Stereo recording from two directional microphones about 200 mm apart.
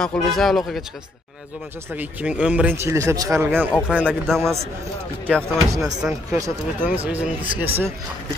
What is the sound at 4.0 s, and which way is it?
Speech, centre (ahead or behind).